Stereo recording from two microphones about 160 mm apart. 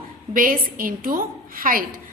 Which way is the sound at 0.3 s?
60° right (ahead or behind).